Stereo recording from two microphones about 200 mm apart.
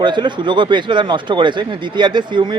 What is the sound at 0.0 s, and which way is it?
Speech, 20° right (ahead or behind).